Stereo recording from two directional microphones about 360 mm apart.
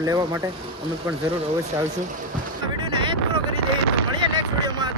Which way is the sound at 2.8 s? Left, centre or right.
Centre.